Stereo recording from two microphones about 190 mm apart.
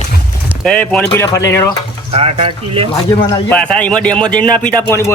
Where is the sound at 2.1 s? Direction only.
30° right (ahead or behind).